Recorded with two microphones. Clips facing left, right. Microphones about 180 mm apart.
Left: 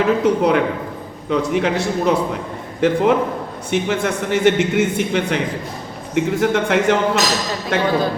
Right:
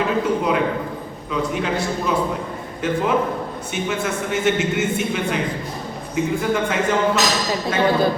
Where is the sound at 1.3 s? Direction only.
75° left (ahead or behind).